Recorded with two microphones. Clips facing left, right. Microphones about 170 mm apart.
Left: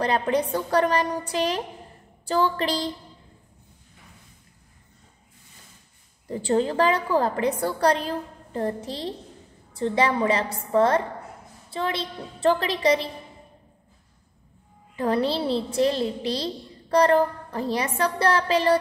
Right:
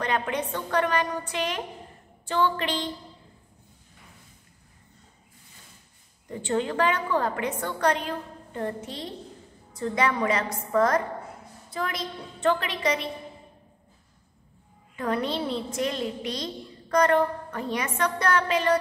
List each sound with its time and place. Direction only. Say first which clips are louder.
0.0 s a woman's voice: left 5 dB; 35° left (ahead or behind)
6.2 s a woman's voice: left 4 dB; 35° left (ahead or behind)
15.0 s a woman's voice: left 4 dB; 30° left (ahead or behind)